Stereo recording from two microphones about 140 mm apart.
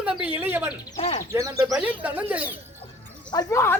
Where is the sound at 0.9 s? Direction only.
55° left (ahead or behind).